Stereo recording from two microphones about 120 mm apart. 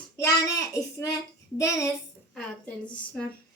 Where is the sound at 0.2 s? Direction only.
30° left (ahead or behind).